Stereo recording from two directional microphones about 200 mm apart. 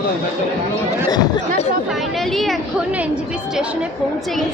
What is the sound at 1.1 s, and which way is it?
Speech, 20° left (ahead or behind).